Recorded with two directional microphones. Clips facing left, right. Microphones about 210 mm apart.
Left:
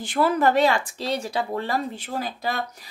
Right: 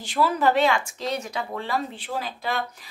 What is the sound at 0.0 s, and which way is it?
A woman's voice, 50° left (ahead or behind).